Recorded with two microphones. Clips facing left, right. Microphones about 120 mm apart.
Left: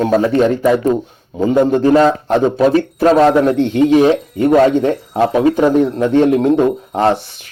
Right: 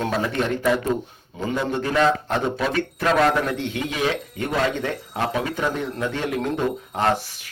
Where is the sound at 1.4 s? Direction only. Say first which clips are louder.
Left 12 dB; 40° left (ahead or behind).